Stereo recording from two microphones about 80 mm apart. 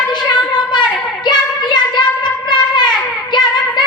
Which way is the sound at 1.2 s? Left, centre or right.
Left.